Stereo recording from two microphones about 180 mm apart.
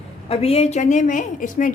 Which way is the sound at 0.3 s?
35° left (ahead or behind).